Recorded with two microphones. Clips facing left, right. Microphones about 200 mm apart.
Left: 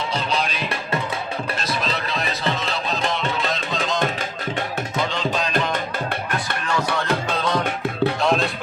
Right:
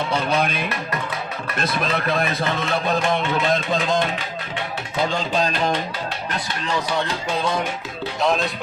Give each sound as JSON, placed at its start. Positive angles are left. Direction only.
{"t": 0.1, "sound": "speech", "side_deg": -55}
{"t": 8.2, "sound": "music", "side_deg": 0}